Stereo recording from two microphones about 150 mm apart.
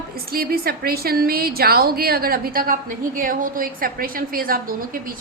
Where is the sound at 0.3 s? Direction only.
85° right.